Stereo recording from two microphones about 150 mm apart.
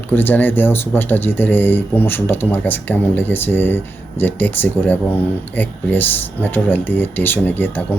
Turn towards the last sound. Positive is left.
turn(degrees=10)  # may be behind; listen again after turning